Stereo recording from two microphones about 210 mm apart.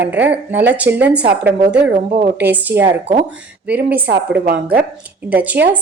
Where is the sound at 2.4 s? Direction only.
10° right (ahead or behind).